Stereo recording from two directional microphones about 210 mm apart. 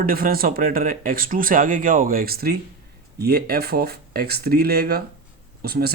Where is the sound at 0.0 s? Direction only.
45° right (ahead or behind).